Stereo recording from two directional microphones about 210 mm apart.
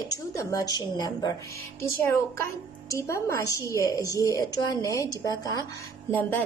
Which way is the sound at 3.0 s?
15° left (ahead or behind).